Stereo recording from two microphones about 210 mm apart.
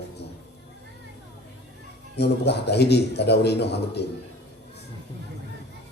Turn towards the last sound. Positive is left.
turn(degrees=50)  # may be behind; listen again after turning